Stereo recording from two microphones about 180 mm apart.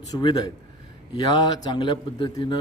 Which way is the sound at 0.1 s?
25° left (ahead or behind).